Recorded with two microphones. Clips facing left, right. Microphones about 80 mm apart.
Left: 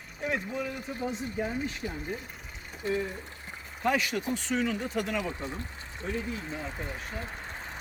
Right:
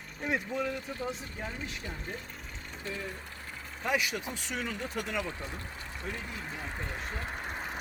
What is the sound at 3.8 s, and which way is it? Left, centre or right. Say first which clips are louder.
Speech: left 4 dB; centre.